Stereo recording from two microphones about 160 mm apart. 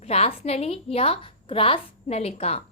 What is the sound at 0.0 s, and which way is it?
A woman's voice, 40° left (ahead or behind).